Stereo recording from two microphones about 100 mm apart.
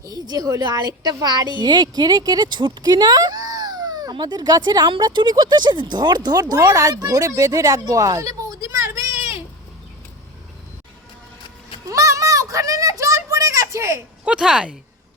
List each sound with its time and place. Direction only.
0.0 s a woman's voice: 40° right (ahead or behind)
11.9 s a sound: 35° right (ahead or behind)
14.3 s speech: 5° right (ahead or behind)